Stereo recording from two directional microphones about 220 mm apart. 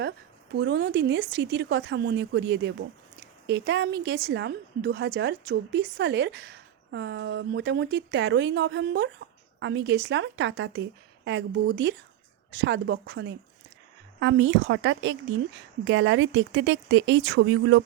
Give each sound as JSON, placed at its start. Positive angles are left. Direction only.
{"t": 0.5, "sound": "a woman's voice", "side_deg": -50}